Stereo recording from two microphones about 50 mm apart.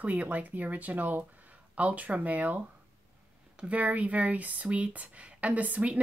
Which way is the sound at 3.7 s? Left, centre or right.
Right.